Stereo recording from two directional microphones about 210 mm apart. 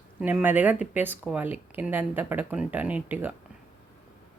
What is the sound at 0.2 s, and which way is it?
Speech, 5° right (ahead or behind).